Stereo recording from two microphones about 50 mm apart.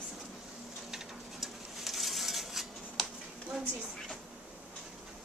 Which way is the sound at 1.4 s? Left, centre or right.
Centre.